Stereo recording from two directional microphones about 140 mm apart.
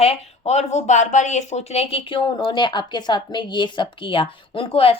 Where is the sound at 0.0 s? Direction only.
50° left (ahead or behind).